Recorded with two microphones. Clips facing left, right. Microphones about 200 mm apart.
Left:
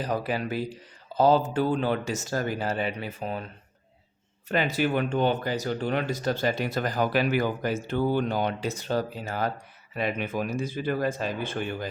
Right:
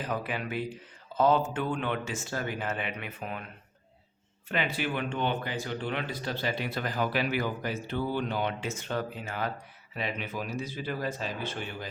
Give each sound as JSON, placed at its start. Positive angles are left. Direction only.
{"t": 0.0, "sound": "speech", "side_deg": 35}
{"t": 4.4, "sound": "speech", "side_deg": 40}
{"t": 9.9, "sound": "speech", "side_deg": 50}